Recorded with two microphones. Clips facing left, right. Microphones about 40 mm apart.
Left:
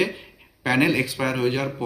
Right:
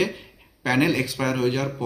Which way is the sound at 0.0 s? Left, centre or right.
Centre.